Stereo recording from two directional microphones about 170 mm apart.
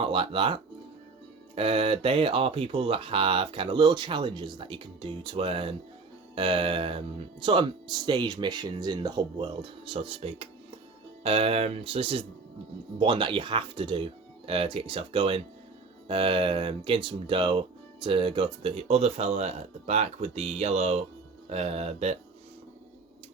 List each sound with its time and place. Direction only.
0.0 s speech: 30° right (ahead or behind)